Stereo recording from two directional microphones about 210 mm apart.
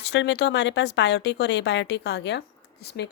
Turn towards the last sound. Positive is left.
turn(degrees=50)  # may be behind; listen again after turning